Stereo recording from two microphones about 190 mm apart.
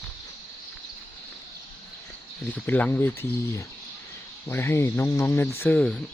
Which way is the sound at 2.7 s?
10° left (ahead or behind).